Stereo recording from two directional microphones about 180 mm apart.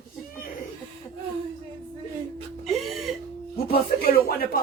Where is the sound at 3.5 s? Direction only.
60° left (ahead or behind).